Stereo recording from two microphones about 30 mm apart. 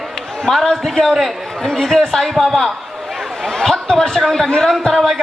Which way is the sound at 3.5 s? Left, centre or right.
Centre.